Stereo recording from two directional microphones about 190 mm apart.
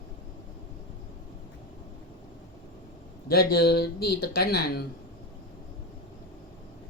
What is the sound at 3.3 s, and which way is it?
Speech, 55° left (ahead or behind).